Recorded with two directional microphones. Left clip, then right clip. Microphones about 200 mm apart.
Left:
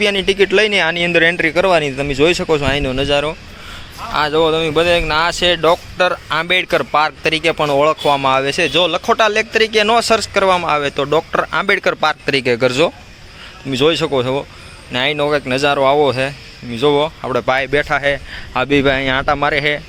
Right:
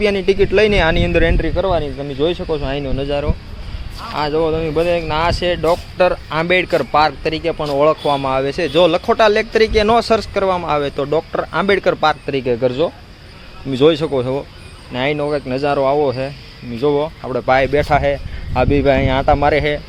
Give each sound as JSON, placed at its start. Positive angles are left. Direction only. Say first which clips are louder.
{"t": 0.0, "sound": "speech", "louder": "left 1 dB", "side_deg": 0}
{"t": 1.4, "sound": "speech", "louder": "left 5 dB", "side_deg": 20}
{"t": 13.7, "sound": "speech", "louder": "right 1 dB", "side_deg": -5}